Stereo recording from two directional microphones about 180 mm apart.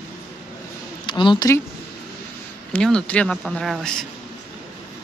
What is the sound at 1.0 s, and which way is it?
Speech, 25° left (ahead or behind).